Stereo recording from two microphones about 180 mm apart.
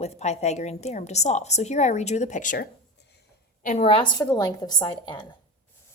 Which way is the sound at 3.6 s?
35° left (ahead or behind).